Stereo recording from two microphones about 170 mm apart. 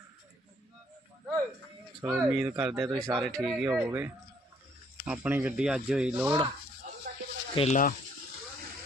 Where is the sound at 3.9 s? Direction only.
15° right (ahead or behind).